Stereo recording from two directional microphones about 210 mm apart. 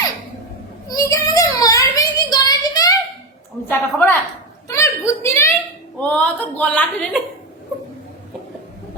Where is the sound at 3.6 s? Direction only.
10° left (ahead or behind).